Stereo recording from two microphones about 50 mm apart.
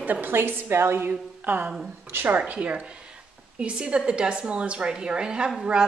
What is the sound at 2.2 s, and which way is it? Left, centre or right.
A woman's voice, right.